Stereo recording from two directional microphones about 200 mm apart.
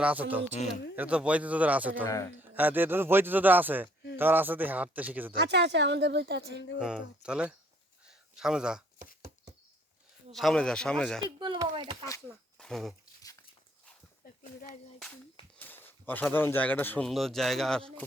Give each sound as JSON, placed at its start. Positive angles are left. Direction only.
{"t": 0.0, "sound": "speech", "side_deg": -10}
{"t": 2.0, "sound": "speech", "side_deg": 15}
{"t": 2.6, "sound": "speech", "side_deg": -10}
{"t": 5.3, "sound": "speech", "side_deg": -55}
{"t": 6.7, "sound": "speech", "side_deg": -5}
{"t": 8.0, "sound": "a sound", "side_deg": -5}
{"t": 10.3, "sound": "speech", "side_deg": 0}
{"t": 11.2, "sound": "speech", "side_deg": -25}
{"t": 12.5, "sound": "a sound", "side_deg": 0}
{"t": 14.9, "sound": "speech", "side_deg": 5}